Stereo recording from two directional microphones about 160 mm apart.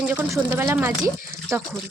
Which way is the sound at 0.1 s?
10° right (ahead or behind).